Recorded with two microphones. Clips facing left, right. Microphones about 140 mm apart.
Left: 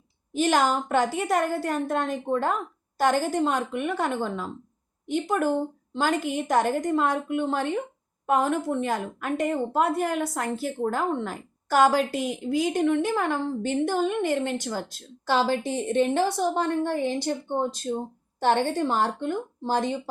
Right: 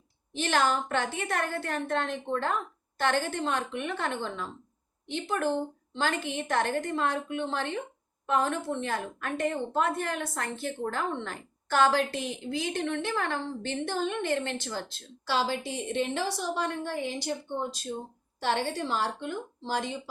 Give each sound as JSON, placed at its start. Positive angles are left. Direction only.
{"t": 0.3, "sound": "a woman's voice", "side_deg": 15}
{"t": 6.1, "sound": "a woman's voice", "side_deg": 15}
{"t": 15.3, "sound": "a woman's voice", "side_deg": 50}